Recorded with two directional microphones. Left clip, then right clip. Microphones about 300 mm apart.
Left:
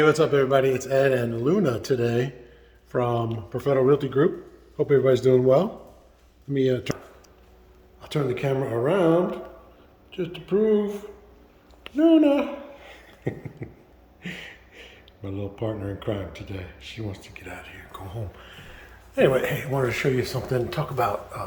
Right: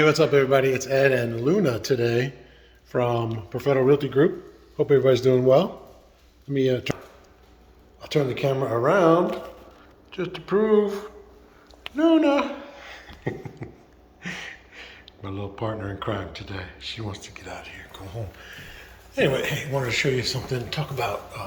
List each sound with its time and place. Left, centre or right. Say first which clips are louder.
0.0 s a man's voice: right 1 dB; centre
8.0 s a man's voice: right 3 dB; centre
11.9 s a sound: left 1 dB; centre
14.2 s a man's voice: right 3 dB; centre